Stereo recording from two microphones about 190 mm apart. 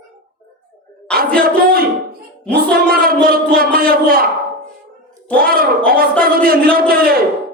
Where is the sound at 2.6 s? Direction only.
50° right (ahead or behind).